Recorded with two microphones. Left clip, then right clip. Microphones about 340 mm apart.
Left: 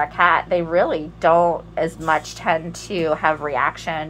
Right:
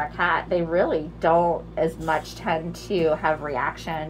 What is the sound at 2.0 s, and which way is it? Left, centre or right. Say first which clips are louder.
A woman's voice: left 5 dB; centre.